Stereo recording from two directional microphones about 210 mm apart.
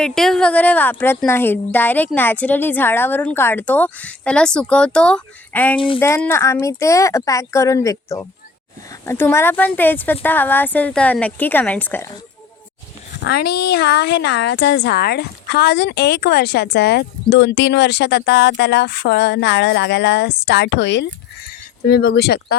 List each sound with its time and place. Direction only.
0.0 s speech: centre (ahead or behind)
13.2 s a woman's voice: 50° left (ahead or behind)